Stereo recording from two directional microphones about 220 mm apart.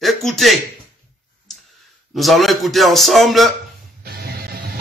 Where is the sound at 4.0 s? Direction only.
45° right (ahead or behind).